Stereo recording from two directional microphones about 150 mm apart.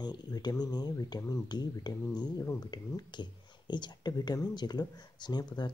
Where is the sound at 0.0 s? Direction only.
30° left (ahead or behind).